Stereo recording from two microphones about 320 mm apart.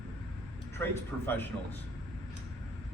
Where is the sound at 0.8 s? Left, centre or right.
Centre.